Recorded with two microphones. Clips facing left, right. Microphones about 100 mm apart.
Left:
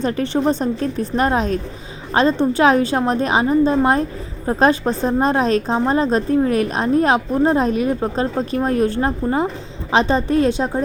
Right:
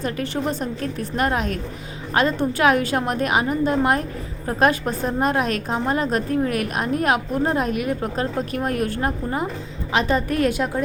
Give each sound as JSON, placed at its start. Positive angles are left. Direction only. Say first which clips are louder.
{"t": 0.0, "sound": "a woman's voice", "louder": "left 6 dB", "side_deg": 30}